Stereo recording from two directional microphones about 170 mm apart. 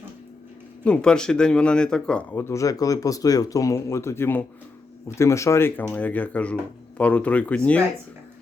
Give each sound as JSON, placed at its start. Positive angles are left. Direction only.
{"t": 0.9, "sound": "speech", "side_deg": 5}